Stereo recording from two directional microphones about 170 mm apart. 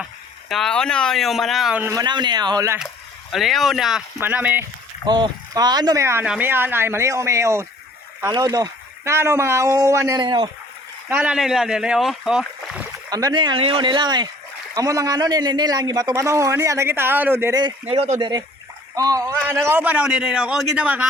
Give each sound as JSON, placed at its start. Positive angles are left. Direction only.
{"t": 0.0, "sound": "speech", "side_deg": 0}
{"t": 1.8, "sound": "a man's voice", "side_deg": -20}
{"t": 3.3, "sound": "speech", "side_deg": 0}
{"t": 5.0, "sound": "a man's voice", "side_deg": -25}
{"t": 11.1, "sound": "speech", "side_deg": -5}
{"t": 13.1, "sound": "a man's voice", "side_deg": -20}
{"t": 17.9, "sound": "speech", "side_deg": -35}
{"t": 18.9, "sound": "a man's voice", "side_deg": -20}